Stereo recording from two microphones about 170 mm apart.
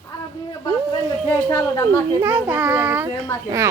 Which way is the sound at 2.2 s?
10° right (ahead or behind).